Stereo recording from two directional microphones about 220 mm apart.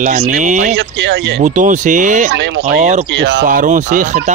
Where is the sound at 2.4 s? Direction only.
45° right (ahead or behind).